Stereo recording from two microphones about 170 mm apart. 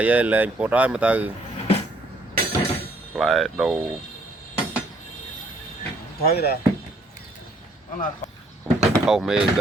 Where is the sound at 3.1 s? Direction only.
Centre (ahead or behind).